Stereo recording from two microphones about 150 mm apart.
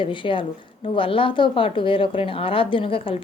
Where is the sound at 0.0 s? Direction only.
35° left (ahead or behind).